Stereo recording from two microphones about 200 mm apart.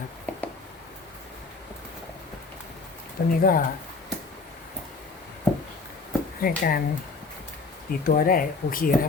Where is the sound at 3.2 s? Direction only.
50° left (ahead or behind).